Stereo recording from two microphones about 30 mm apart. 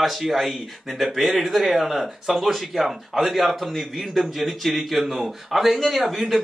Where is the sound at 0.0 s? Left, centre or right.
Centre.